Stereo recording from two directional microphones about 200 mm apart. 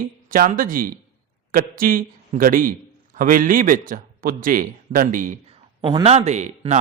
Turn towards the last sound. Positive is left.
turn(degrees=-35)  # may be behind; listen again after turning